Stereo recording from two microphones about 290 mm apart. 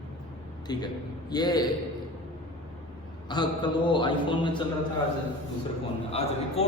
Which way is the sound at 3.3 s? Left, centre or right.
Centre.